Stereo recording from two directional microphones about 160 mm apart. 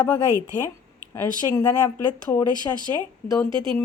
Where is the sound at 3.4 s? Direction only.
30° right (ahead or behind).